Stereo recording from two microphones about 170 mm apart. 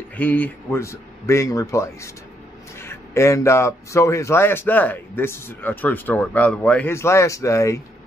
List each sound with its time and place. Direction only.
0.2 s speech: 10° left (ahead or behind)